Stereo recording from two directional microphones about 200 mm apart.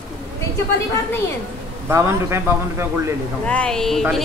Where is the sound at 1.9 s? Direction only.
15° right (ahead or behind).